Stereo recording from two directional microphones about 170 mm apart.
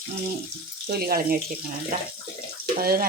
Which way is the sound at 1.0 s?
60° right (ahead or behind).